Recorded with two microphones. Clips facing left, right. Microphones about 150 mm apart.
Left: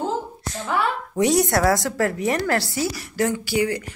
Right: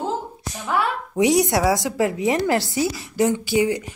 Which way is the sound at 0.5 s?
15° right (ahead or behind).